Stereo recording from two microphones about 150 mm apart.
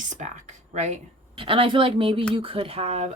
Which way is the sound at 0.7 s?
50° right (ahead or behind).